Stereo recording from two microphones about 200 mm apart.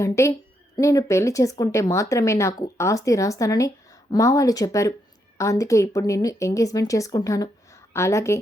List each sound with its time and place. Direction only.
0.0 s speech: 15° left (ahead or behind)